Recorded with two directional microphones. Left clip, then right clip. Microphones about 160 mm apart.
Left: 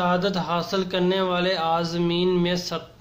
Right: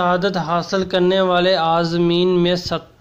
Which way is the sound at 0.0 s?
40° right (ahead or behind).